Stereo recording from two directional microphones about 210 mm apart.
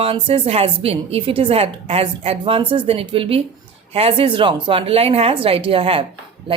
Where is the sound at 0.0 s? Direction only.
25° right (ahead or behind).